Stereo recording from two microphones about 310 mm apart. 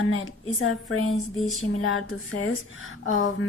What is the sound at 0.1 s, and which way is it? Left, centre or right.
Speech, left.